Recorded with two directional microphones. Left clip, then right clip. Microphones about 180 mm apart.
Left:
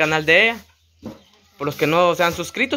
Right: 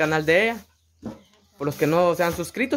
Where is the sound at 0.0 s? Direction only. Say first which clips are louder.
Left 4 dB; 10° right (ahead or behind).